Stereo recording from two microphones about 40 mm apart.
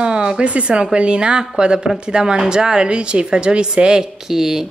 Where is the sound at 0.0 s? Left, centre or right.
Right.